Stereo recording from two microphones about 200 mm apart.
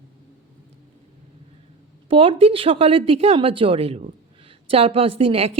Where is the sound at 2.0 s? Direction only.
25° right (ahead or behind).